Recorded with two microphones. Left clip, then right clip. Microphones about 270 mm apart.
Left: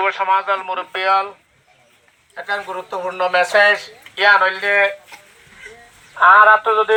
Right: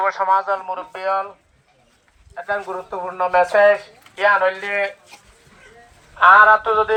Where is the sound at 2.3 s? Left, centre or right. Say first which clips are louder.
Left 1 dB; right; by 4.9 s centre.